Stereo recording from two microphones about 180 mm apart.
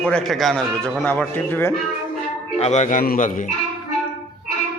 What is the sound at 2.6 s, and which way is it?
Speech, 40° left (ahead or behind).